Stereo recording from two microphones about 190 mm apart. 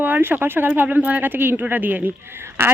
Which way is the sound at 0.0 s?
10° right (ahead or behind).